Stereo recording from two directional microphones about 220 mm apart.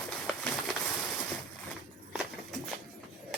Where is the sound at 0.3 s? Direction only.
5° left (ahead or behind).